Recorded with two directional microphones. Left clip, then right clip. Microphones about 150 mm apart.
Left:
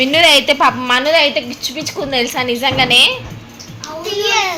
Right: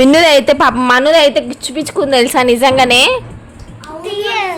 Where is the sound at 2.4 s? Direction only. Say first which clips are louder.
Right 6 dB; 90° right.